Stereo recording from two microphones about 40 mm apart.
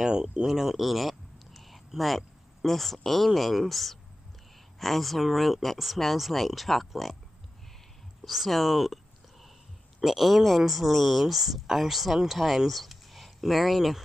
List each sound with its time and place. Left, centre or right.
0.0 s speech: centre
0.5 s speech: centre
8.2 s whispering: centre
9.9 s speech: centre